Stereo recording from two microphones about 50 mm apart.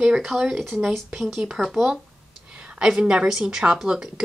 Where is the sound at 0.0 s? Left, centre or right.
Centre.